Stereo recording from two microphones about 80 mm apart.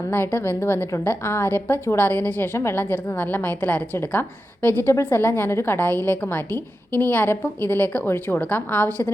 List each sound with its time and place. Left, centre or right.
0.1 s a woman's voice: left